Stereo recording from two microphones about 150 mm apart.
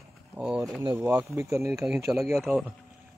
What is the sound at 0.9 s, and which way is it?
Speech, 10° right (ahead or behind).